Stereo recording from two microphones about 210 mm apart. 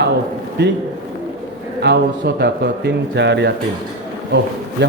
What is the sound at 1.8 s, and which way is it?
Speech, 50° right (ahead or behind).